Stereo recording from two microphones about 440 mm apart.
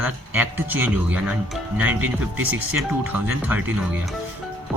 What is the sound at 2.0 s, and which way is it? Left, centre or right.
Speech, right.